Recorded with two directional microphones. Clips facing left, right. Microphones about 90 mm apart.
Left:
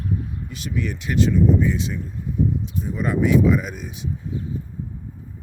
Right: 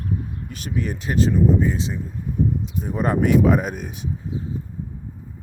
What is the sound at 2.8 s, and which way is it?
Speech, 45° right (ahead or behind).